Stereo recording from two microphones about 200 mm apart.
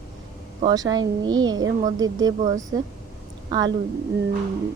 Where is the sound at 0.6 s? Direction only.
20° right (ahead or behind).